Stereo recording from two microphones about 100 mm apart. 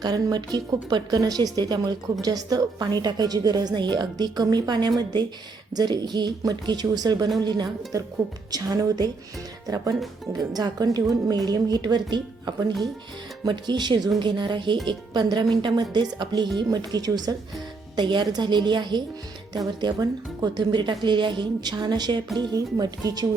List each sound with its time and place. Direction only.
0.0 s a woman's voice: 40° right (ahead or behind)